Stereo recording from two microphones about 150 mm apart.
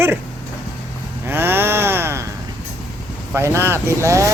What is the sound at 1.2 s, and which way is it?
Cattle, 15° right (ahead or behind).